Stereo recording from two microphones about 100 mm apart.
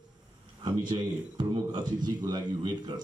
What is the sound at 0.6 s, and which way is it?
A man's voice, 45° right (ahead or behind).